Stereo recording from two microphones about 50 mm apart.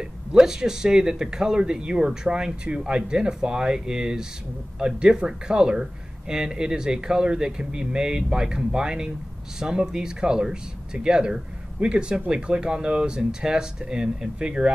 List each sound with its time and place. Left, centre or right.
0.3 s speech: centre